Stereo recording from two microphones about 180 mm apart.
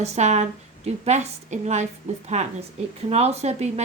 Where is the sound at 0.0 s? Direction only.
40° right (ahead or behind).